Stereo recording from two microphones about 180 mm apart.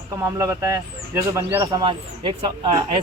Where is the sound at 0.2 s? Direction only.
15° right (ahead or behind).